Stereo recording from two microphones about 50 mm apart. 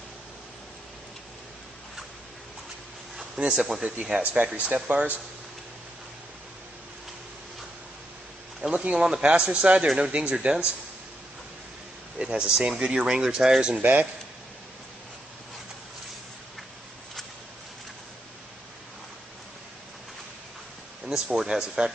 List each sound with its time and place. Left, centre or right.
3.3 s speech: centre
4.2 s speech: right
8.5 s speech: centre
12.2 s speech: centre
21.3 s speech: centre